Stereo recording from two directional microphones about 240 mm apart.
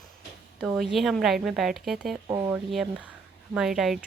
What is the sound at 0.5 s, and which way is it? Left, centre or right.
Speech, centre.